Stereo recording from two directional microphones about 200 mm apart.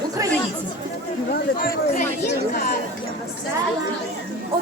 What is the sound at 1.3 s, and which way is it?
Speech, 50° left (ahead or behind).